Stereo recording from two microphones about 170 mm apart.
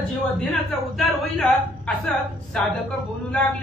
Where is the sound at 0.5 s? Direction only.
Centre (ahead or behind).